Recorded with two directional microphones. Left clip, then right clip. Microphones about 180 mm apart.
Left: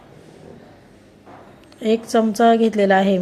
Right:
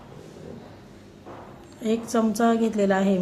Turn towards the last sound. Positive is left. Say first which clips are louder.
# left 7 dB
turn(degrees=25)  # may be behind; listen again after turning